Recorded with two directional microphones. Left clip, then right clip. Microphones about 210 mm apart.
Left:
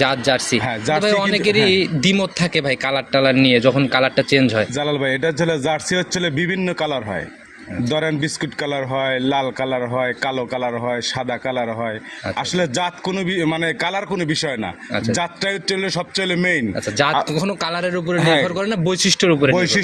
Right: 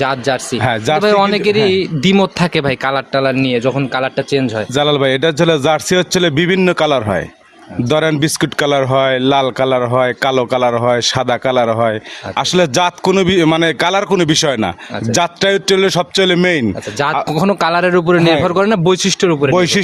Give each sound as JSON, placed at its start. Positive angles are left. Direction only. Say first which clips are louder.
{"t": 0.0, "sound": "speech", "louder": "right 2 dB", "side_deg": -30}
{"t": 0.6, "sound": "speech", "louder": "right 6 dB", "side_deg": -50}
{"t": 0.9, "sound": "speech", "louder": "right 4 dB", "side_deg": -35}
{"t": 2.0, "sound": "speech", "louder": "right 5 dB", "side_deg": -35}
{"t": 3.1, "sound": "a man's voice", "louder": "left 4 dB", "side_deg": -25}
{"t": 4.7, "sound": "speech", "louder": "right 7 dB", "side_deg": -45}
{"t": 17.0, "sound": "speech", "louder": "right 2 dB", "side_deg": -20}
{"t": 17.3, "sound": "speech", "louder": "right 9 dB", "side_deg": -40}
{"t": 18.2, "sound": "a man's voice", "louder": "right 4 dB", "side_deg": -10}
{"t": 18.4, "sound": "speech", "louder": "right 8 dB", "side_deg": -45}